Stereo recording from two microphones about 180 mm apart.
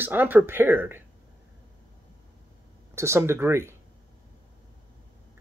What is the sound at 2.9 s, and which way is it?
Speech, 15° right (ahead or behind).